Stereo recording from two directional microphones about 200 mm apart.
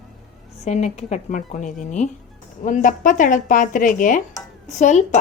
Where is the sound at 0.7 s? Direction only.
35° left (ahead or behind).